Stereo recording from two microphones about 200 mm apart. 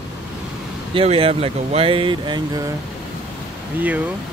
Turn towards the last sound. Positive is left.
turn(degrees=-10)  # may be behind; listen again after turning